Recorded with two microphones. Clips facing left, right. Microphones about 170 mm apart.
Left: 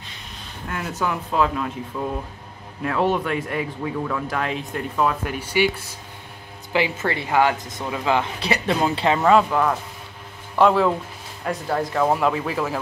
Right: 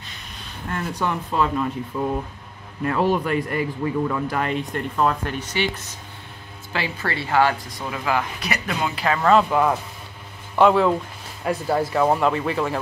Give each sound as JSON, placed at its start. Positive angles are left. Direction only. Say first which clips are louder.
{"t": 0.7, "sound": "speech", "louder": "even", "side_deg": 5}
{"t": 2.8, "sound": "speech", "louder": "right 1 dB", "side_deg": 0}
{"t": 6.7, "sound": "speech", "louder": "left 4 dB", "side_deg": 20}
{"t": 9.2, "sound": "speech", "louder": "even", "side_deg": 5}
{"t": 9.5, "sound": "a man's voice", "louder": "right 1 dB", "side_deg": -10}